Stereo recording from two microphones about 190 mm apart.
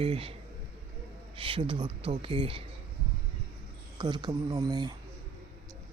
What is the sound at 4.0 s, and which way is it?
Speech, 25° right (ahead or behind).